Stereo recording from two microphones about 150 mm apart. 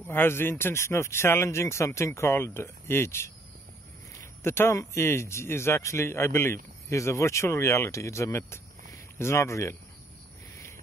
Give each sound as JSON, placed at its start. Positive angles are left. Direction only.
{"t": 0.0, "sound": "speech", "side_deg": 15}